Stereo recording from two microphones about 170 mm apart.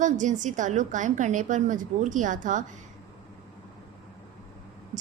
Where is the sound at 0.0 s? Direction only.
45° right (ahead or behind).